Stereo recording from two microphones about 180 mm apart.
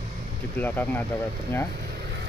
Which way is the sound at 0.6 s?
10° left (ahead or behind).